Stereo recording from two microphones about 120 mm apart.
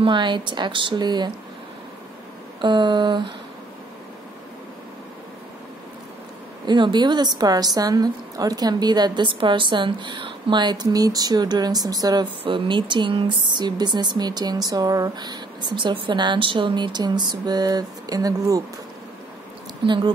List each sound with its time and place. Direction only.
0.0 s a woman's voice: 40° right (ahead or behind)
2.6 s a woman's voice: 40° right (ahead or behind)
6.6 s a woman's voice: 40° right (ahead or behind)
19.8 s speech: 45° right (ahead or behind)